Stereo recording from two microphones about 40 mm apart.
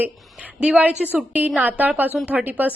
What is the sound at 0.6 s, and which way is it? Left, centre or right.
Speech, right.